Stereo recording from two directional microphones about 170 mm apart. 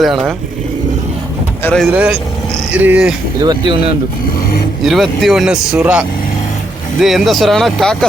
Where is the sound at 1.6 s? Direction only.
10° left (ahead or behind).